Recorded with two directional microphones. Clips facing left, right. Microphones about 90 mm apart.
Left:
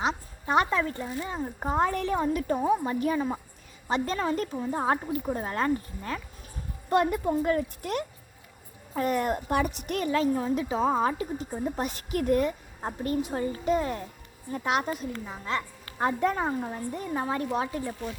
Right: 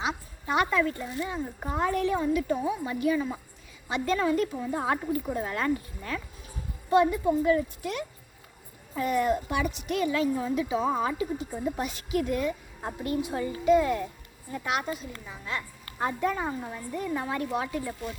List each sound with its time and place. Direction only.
0.4 s a child's voice: 35° left (ahead or behind)
6.9 s a woman's voice: 55° left (ahead or behind)
12.8 s a child's voice: 40° left (ahead or behind)
16.2 s a child's voice: 45° left (ahead or behind); by 17.9 s 30° left (ahead or behind)